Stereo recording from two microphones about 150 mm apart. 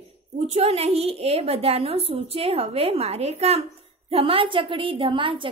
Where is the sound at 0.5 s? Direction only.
45° right (ahead or behind).